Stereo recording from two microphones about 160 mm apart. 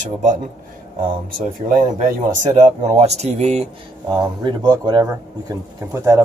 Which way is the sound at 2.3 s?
50° right (ahead or behind).